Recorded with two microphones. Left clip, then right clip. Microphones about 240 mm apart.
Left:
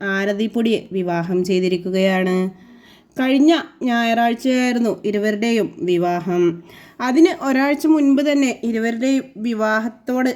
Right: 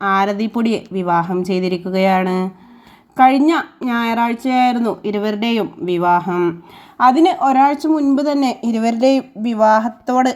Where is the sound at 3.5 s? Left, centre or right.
Centre.